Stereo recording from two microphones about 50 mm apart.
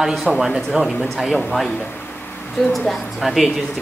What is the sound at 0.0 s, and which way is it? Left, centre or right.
Speech, centre.